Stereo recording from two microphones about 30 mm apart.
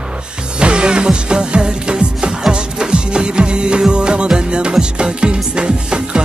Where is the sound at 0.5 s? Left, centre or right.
Right.